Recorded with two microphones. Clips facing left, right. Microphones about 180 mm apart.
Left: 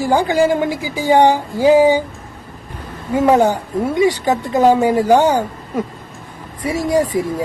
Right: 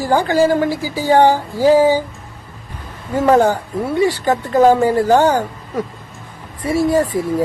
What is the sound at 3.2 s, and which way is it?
Speech, 10° left (ahead or behind).